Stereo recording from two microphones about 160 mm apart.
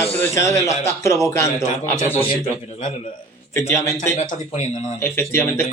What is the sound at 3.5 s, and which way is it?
Speech, 15° left (ahead or behind).